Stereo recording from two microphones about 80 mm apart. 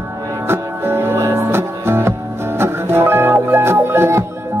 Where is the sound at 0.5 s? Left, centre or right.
Right.